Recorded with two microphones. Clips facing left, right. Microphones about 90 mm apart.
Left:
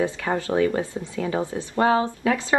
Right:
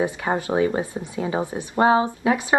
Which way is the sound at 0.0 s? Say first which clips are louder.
Right 1 dB; 20° right (ahead or behind).